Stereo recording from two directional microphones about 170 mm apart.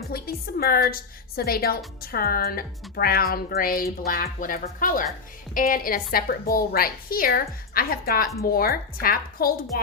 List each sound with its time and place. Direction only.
0.1 s a woman's voice: 60° left (ahead or behind)